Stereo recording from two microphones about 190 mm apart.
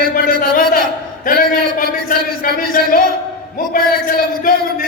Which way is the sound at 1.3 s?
50° left (ahead or behind).